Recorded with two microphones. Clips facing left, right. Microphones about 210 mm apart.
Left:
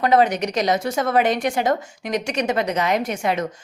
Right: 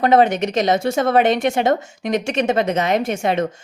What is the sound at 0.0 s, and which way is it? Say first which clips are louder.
A woman's voice: right 3 dB; 25° right (ahead or behind).